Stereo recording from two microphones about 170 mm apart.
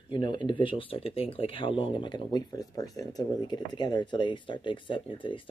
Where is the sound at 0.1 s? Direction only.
25° left (ahead or behind).